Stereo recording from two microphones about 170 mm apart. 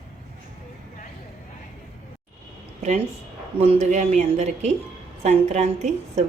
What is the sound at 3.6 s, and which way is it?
Speech, 40° right (ahead or behind).